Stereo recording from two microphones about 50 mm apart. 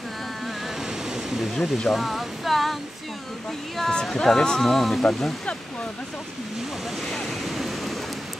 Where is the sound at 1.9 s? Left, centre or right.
Centre.